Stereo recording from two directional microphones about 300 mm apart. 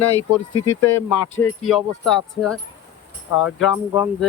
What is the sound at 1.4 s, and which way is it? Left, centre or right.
Speech, centre.